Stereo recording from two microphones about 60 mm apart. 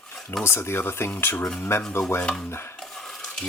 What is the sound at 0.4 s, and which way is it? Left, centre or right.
Speech, left.